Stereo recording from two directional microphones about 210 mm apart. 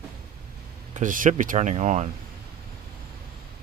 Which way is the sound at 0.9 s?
40° right (ahead or behind).